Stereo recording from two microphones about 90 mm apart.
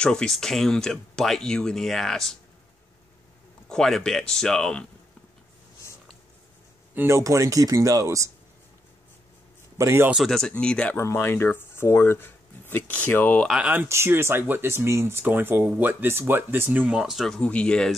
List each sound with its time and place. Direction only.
0.0 s speech: 10° left (ahead or behind)
3.6 s speech: 5° left (ahead or behind)
6.9 s a sound: 20° right (ahead or behind)
7.2 s speech: 35° right (ahead or behind)
9.8 s a man's voice: 30° right (ahead or behind)
10.1 s speech: 5° left (ahead or behind)
11.0 s speech: 25° left (ahead or behind)
13.5 s speech: 15° right (ahead or behind)
13.8 s speech: 30° right (ahead or behind); by 17.4 s centre (ahead or behind)
17.4 s speech: 15° left (ahead or behind)